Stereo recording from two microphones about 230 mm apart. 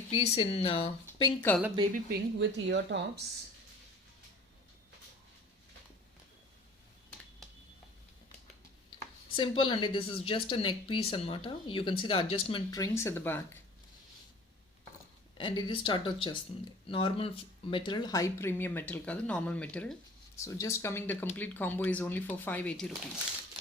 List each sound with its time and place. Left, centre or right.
0.1 s a woman's voice: left
1.4 s speech: centre
1.9 s speech: right
9.3 s a woman's voice: left
15.4 s a woman's voice: left; by 23.0 s centre